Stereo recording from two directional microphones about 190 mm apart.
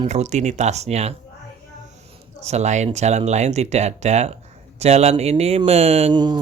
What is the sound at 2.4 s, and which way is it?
Speech, 35° right (ahead or behind).